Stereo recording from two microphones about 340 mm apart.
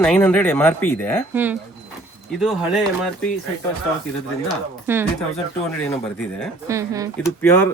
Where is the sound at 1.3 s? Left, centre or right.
Centre.